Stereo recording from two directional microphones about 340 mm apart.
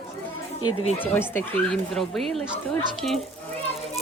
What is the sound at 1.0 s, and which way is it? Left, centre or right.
Speech, centre.